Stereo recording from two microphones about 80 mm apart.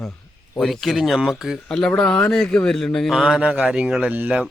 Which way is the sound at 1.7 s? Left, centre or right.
Centre.